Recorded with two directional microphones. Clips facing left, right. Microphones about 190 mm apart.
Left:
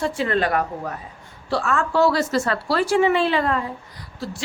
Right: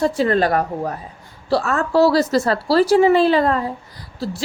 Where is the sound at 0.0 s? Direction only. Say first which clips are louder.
Right 5 dB; 40° right (ahead or behind).